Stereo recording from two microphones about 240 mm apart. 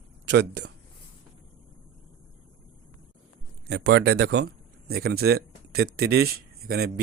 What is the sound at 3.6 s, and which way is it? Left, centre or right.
Speech, right.